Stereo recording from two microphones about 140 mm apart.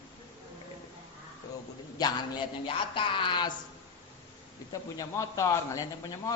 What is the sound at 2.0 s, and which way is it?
Speech, 25° left (ahead or behind).